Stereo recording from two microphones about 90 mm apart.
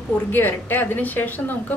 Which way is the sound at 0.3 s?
20° left (ahead or behind).